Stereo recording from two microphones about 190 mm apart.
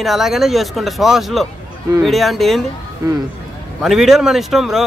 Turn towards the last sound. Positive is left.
turn(degrees=0)  # may be behind; listen again after turning